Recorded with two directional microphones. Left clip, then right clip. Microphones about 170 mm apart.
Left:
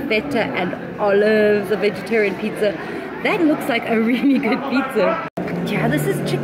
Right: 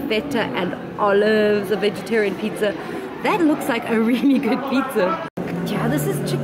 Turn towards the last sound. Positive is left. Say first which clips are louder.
# left 2 dB
turn(degrees=-5)  # may be behind; listen again after turning